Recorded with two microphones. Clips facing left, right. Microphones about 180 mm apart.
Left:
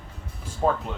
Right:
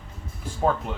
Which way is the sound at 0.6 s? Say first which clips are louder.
Even; centre (ahead or behind).